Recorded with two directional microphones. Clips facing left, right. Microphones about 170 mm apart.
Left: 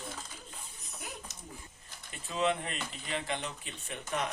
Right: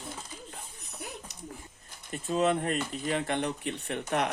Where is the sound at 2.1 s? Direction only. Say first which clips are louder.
Right 5 dB; 45° right (ahead or behind).